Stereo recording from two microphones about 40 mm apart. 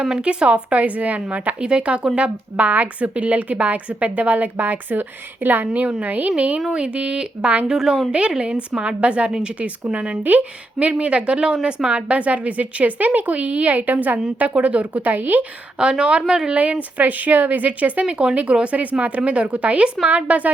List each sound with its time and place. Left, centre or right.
0.2 s a woman's voice: right
1.5 s a woman's voice: right
6.3 s a woman's voice: right
6.6 s speech: centre
7.7 s a woman's voice: centre
8.8 s speech: right
10.2 s a woman's voice: right
15.1 s a woman's voice: right
15.8 s a woman's voice: right
16.6 s a woman's voice: right
17.0 s a woman's voice: right
18.0 s a woman's voice: right